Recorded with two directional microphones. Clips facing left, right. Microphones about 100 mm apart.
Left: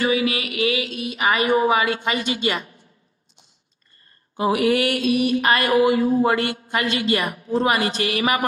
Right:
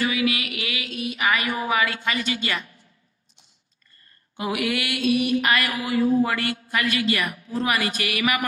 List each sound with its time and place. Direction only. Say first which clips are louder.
0.0 s speech: left 3 dB; 30° left (ahead or behind)
4.4 s mantra: left 7 dB; 35° left (ahead or behind)